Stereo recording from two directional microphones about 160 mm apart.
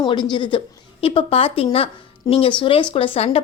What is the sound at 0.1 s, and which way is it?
A woman's voice, 30° left (ahead or behind).